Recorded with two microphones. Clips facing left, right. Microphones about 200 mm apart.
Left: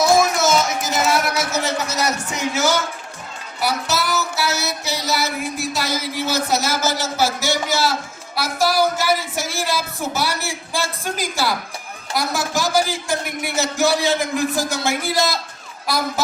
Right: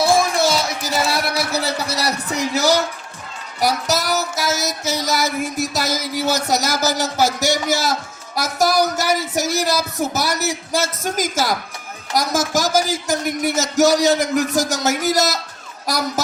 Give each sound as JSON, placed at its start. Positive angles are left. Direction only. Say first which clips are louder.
{"t": 0.0, "sound": "music", "louder": "even", "side_deg": -35}
{"t": 7.2, "sound": "a man's voice", "louder": "right 2 dB", "side_deg": -40}
{"t": 8.4, "sound": "music", "louder": "right 1 dB", "side_deg": -45}
{"t": 15.9, "sound": "a man's voice", "louder": "even", "side_deg": -45}